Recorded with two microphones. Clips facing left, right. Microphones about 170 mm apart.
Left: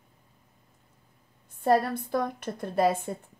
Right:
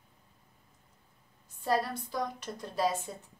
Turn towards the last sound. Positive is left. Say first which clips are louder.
# left 6 dB
turn(degrees=55)  # may be behind; listen again after turning